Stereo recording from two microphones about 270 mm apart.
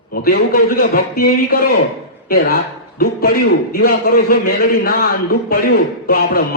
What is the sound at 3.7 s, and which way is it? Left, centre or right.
A man's voice, left.